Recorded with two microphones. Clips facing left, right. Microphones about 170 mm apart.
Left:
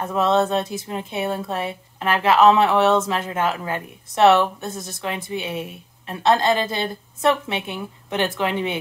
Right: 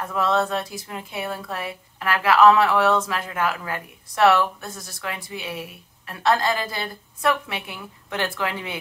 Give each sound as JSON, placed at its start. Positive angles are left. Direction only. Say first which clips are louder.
{"t": 0.0, "sound": "a woman's voice", "louder": "left 3 dB", "side_deg": 20}